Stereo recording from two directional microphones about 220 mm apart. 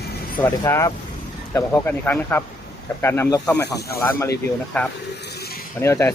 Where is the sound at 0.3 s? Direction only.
10° left (ahead or behind).